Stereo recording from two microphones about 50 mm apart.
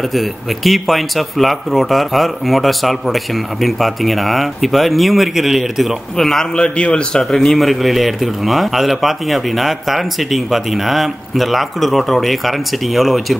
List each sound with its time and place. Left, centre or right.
0.1 s a man's voice: centre
6.1 s a man's voice: centre
6.5 s a man's voice: left
7.2 s a man's voice: centre